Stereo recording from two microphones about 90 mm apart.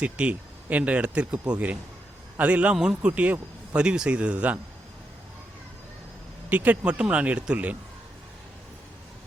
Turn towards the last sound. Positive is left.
turn(degrees=-15)  # may be behind; listen again after turning